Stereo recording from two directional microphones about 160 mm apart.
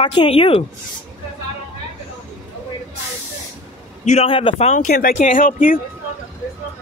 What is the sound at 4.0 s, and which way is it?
Speech, 45° left (ahead or behind).